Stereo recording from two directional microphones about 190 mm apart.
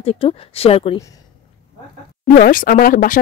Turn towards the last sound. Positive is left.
turn(degrees=45)  # may be behind; listen again after turning